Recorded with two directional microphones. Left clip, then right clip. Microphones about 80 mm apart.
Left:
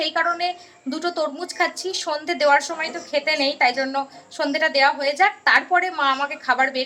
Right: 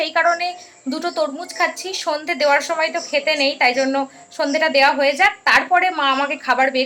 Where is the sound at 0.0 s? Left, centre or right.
Right.